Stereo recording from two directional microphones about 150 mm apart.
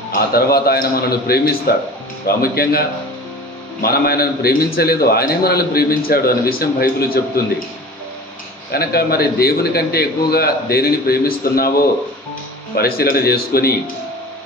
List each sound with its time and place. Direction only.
0.1 s a man's voice: 90° left
3.8 s a man's voice: 90° left
8.7 s a man's voice: 90° left
12.7 s a man's voice: 90° left